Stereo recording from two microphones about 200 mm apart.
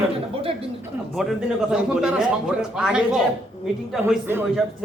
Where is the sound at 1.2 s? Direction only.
Centre (ahead or behind).